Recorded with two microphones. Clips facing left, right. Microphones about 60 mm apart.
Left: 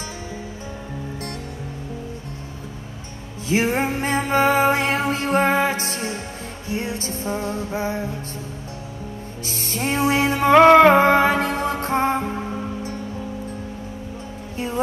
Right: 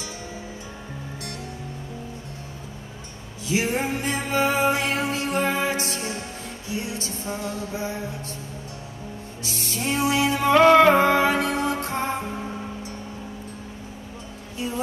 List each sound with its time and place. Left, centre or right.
3.4 s music: left
9.4 s music: left
14.6 s music: left